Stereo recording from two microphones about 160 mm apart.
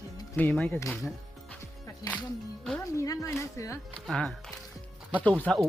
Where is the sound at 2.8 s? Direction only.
20° left (ahead or behind).